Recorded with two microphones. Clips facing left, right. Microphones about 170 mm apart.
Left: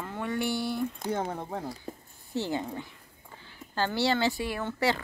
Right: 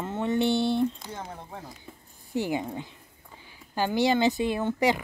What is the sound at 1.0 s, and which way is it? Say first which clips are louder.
Speech: left 8 dB; 55° left (ahead or behind).